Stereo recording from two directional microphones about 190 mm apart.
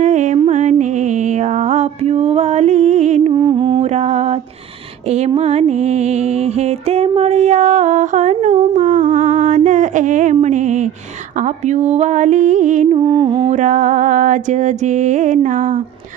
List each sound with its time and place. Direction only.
0.0 s music: 40° right (ahead or behind)
3.3 s mantra: 25° right (ahead or behind)
5.0 s music: 35° right (ahead or behind)
13.0 s music: 25° right (ahead or behind)
13.5 s music: 40° right (ahead or behind)